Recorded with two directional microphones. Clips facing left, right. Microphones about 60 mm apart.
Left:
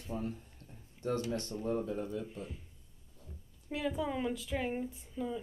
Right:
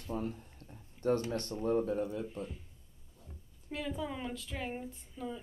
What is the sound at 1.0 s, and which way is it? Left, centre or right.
Speech, right.